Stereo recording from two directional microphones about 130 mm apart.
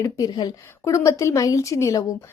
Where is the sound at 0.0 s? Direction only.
30° left (ahead or behind).